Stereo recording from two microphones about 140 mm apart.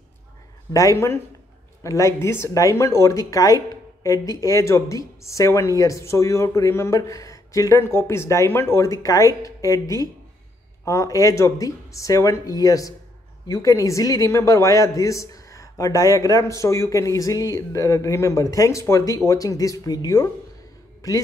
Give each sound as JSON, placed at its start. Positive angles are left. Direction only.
{"t": 0.7, "sound": "a woman's voice", "side_deg": 20}